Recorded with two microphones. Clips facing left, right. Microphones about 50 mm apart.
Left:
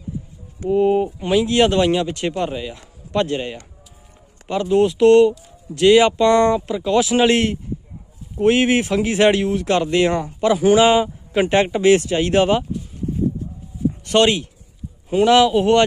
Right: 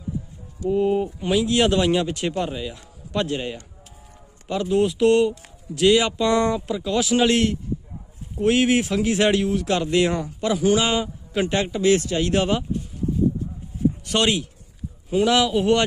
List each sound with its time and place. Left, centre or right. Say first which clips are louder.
0.7 s speech: left 4 dB; centre
1.2 s a man's voice: left 3 dB; centre
11.5 s speech: left 5 dB; left; by 12.6 s centre
14.0 s speech: left 9 dB; centre